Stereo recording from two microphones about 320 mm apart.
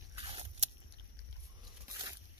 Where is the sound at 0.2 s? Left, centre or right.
Centre.